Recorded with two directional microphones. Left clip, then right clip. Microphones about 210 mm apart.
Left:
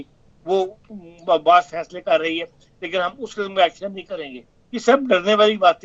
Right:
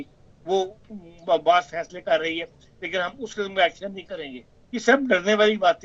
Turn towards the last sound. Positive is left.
turn(degrees=20)  # may be behind; listen again after turning